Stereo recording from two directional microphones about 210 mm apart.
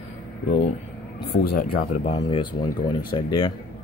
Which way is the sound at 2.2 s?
20° left (ahead or behind).